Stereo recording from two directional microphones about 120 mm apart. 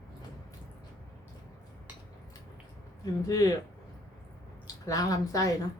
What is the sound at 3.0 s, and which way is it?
Speech, 30° left (ahead or behind).